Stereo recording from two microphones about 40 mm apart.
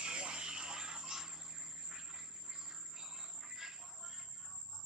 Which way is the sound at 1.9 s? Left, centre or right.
Centre.